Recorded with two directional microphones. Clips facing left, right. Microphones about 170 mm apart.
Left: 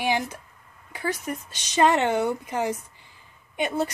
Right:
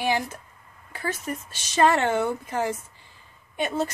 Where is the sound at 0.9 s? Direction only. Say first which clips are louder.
Left 2 dB; 15° left (ahead or behind).